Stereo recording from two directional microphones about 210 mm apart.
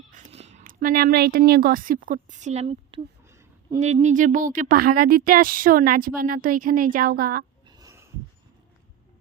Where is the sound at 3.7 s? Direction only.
35° right (ahead or behind).